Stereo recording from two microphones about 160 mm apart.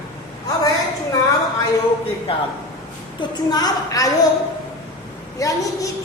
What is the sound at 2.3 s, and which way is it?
Speech, 35° left (ahead or behind).